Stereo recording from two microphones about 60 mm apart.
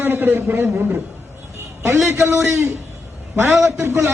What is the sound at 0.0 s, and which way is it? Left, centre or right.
A man's voice, right.